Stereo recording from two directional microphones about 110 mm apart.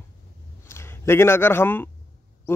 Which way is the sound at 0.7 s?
25° left (ahead or behind).